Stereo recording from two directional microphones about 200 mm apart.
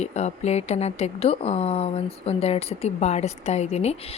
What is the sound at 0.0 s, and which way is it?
A woman's voice, 35° left (ahead or behind).